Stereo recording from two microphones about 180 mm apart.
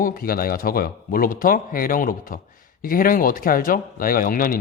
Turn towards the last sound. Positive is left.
turn(degrees=50)  # may be behind; listen again after turning